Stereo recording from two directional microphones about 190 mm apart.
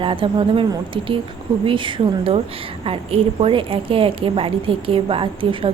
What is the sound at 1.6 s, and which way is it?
A woman's voice, 25° right (ahead or behind).